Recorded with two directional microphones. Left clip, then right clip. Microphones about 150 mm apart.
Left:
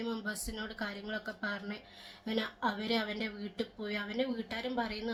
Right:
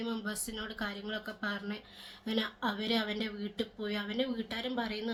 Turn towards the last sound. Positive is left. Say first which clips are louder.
# even
turn(degrees=-5)  # may be behind; listen again after turning